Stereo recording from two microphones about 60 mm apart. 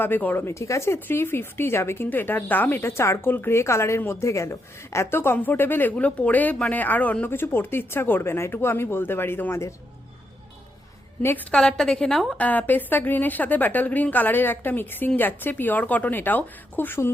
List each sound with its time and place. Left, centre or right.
0.0 s a woman's voice: left
0.4 s a woman's voice: left
2.0 s a woman's voice: left
3.2 s a woman's voice: left
5.1 s a woman's voice: left
6.0 s speech: left
7.3 s a woman's voice: left
11.5 s a woman's voice: centre
12.4 s a woman's voice: left